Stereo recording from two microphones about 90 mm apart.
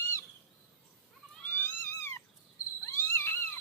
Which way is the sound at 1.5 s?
25° left (ahead or behind).